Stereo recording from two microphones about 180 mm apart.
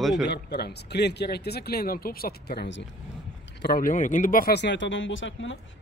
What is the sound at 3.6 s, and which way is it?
Speech, 50° left (ahead or behind).